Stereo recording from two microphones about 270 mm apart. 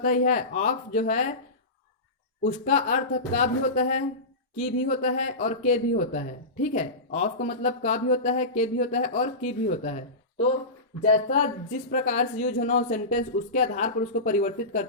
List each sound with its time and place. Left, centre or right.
0.0 s speech: left
2.4 s speech: left
11.0 s speech: left